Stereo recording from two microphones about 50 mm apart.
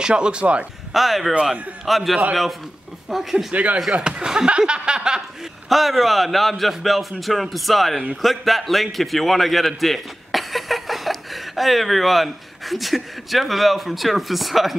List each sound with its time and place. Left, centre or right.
0.0 s speech: centre
0.9 s a man's voice: centre
1.3 s speech: right
1.9 s a man's voice: centre
3.5 s speech: right
5.7 s a man's voice: centre